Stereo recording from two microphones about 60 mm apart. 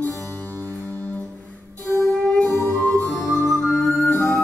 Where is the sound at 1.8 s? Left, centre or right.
Left.